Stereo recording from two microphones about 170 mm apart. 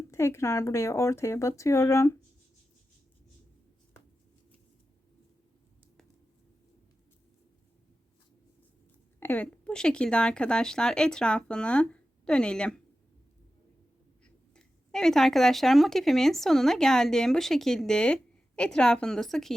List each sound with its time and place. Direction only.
0.1 s speech: 15° left (ahead or behind)
9.2 s speech: 10° left (ahead or behind)
14.5 s speech: 5° left (ahead or behind)